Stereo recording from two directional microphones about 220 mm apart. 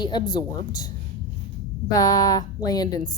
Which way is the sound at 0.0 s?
20° left (ahead or behind).